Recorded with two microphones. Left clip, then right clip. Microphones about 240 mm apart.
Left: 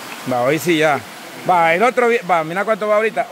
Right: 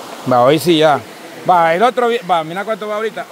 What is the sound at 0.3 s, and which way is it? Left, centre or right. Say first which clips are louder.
Speech: right 6 dB; centre.